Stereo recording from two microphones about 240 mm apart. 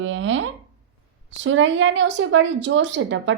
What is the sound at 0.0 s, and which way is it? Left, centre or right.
A woman's voice, right.